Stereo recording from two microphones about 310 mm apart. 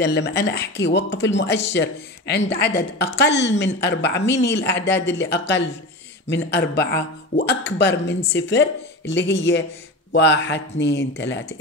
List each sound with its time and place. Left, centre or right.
0.0 s a woman's voice: left